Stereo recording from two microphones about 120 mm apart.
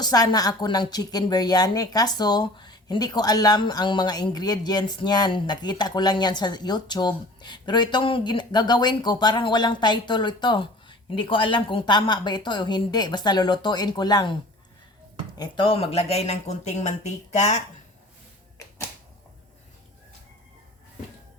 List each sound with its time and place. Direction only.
0.0 s a woman's voice: 35° left (ahead or behind)
15.4 s speech: 45° left (ahead or behind); by 17.6 s 75° left (ahead or behind)